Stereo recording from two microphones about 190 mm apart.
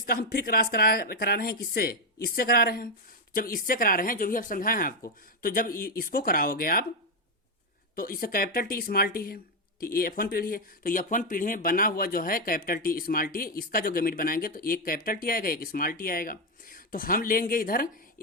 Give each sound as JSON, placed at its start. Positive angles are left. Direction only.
{"t": 0.0, "sound": "speech", "side_deg": 50}
{"t": 7.9, "sound": "speech", "side_deg": 50}